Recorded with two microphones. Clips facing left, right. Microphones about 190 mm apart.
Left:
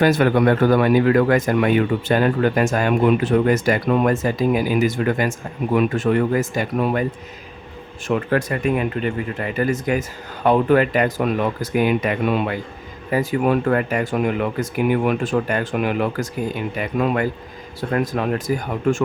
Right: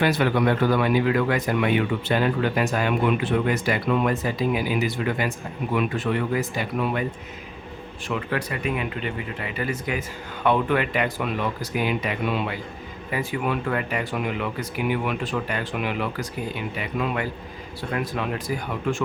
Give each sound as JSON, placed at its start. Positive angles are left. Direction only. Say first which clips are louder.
{"t": 0.0, "sound": "speech", "louder": "left 5 dB", "side_deg": 45}
{"t": 8.0, "sound": "speech", "louder": "left 7 dB", "side_deg": 45}